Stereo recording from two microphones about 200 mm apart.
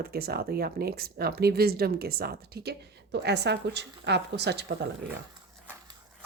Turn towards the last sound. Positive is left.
turn(degrees=-55)  # may be behind; listen again after turning